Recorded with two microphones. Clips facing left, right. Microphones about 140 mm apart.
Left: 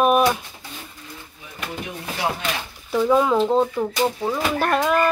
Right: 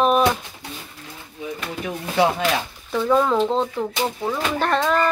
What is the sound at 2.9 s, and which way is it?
Speech, 5° left (ahead or behind).